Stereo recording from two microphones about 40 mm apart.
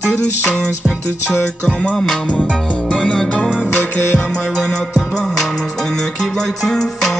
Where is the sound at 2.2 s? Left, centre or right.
Left.